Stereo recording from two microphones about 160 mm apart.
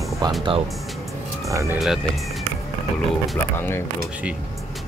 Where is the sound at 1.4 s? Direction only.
20° right (ahead or behind).